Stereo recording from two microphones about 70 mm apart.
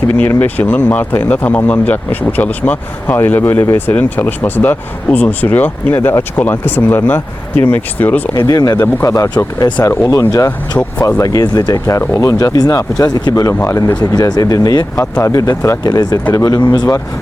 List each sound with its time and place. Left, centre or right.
0.2 s speech: left
8.3 s speech: left
12.5 s speech: left
13.5 s speech: left
14.2 s speech: left
15.2 s speech: left
15.8 s speech: left